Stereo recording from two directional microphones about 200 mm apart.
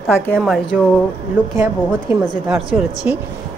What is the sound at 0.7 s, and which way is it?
A woman's voice, 5° right (ahead or behind).